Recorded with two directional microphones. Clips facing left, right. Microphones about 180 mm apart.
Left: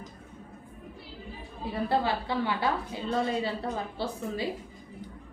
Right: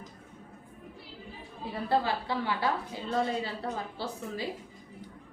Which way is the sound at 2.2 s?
25° left (ahead or behind).